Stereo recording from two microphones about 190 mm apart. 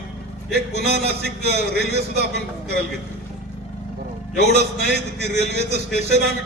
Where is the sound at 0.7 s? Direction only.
55° right (ahead or behind).